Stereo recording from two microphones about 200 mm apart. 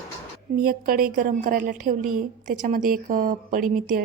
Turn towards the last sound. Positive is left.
turn(degrees=-40)  # may be behind; listen again after turning